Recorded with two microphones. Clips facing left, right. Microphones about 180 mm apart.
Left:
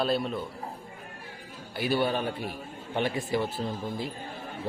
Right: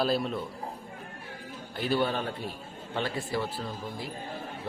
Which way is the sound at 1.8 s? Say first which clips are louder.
Left 1 dB; 10° left (ahead or behind).